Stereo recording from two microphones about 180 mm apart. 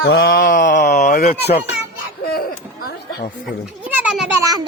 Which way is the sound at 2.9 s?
60° left (ahead or behind).